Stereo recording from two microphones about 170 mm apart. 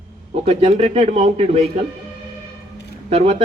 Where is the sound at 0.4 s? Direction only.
35° right (ahead or behind).